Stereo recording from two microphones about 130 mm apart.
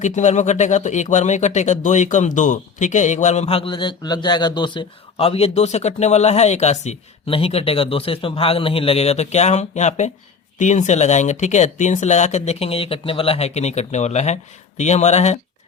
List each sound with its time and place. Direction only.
0.0 s speech: 70° left (ahead or behind)